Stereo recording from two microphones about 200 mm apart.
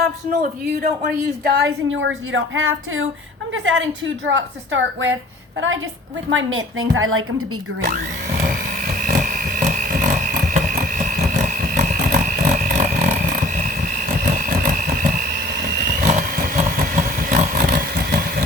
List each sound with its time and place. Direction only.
1.5 s a woman's voice: 55° right (ahead or behind); by 3.1 s 90° right
3.5 s a woman's voice: 70° right (ahead or behind); by 7.4 s 90° right
8.4 s a sound: 45° right (ahead or behind)